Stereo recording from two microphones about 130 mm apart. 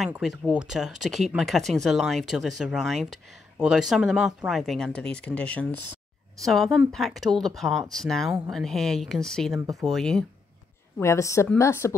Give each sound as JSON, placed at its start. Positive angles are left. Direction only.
{"t": 0.1, "sound": "speech", "side_deg": -5}
{"t": 6.4, "sound": "speech", "side_deg": 0}
{"t": 11.0, "sound": "a woman's voice", "side_deg": 20}